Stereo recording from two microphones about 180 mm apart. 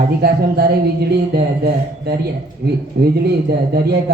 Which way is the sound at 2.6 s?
60° right (ahead or behind).